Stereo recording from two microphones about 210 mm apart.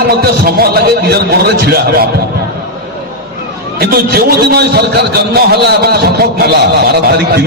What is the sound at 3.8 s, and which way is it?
A man's voice, 45° right (ahead or behind).